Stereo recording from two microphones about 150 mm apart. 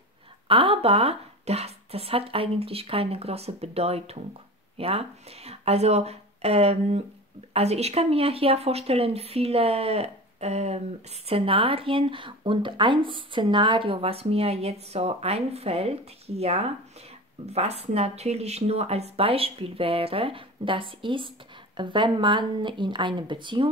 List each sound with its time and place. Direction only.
0.5 s speech: 35° right (ahead or behind)